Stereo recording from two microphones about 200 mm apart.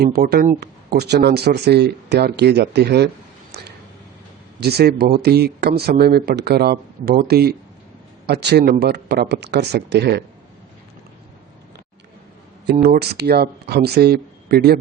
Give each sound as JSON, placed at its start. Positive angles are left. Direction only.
{"t": 0.0, "sound": "speech", "side_deg": -50}
{"t": 3.5, "sound": "a sound", "side_deg": -55}
{"t": 4.6, "sound": "speech", "side_deg": -55}
{"t": 12.8, "sound": "speech", "side_deg": -50}